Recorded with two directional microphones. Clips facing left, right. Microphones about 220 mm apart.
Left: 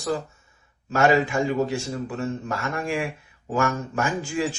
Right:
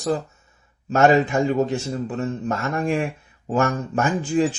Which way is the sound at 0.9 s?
40° right (ahead or behind).